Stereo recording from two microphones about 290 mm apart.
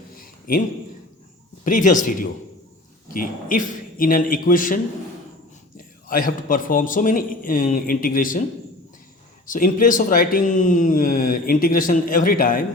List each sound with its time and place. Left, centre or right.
0.2 s a sound: left
1.6 s speech: left
9.5 s speech: left